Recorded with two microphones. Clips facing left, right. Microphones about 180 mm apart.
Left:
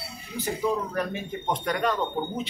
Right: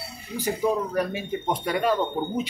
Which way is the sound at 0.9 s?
10° right (ahead or behind).